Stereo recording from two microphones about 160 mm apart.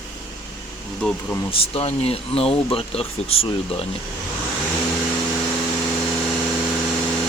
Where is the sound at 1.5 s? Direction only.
35° left (ahead or behind).